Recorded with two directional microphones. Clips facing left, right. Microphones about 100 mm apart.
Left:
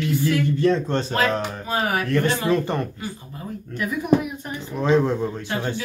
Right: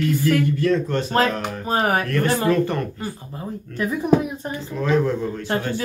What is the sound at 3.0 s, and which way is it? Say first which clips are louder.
Speech: right 3 dB; 30° right (ahead or behind).